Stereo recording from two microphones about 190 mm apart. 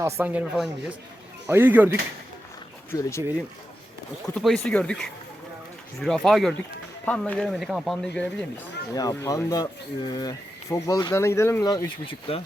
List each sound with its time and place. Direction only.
0.0 s speech: 10° right (ahead or behind)
2.9 s speech: 15° left (ahead or behind)
4.4 s speech: centre (ahead or behind)
9.0 s speech: 20° left (ahead or behind)